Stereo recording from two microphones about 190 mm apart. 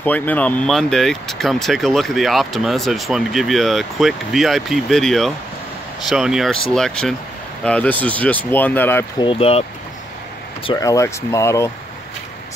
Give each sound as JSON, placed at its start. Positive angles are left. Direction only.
{"t": 0.0, "sound": "speech", "side_deg": 10}
{"t": 9.2, "sound": "speech", "side_deg": 30}
{"t": 10.6, "sound": "speech", "side_deg": 20}